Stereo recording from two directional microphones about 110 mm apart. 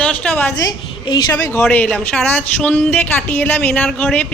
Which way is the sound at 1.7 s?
15° left (ahead or behind).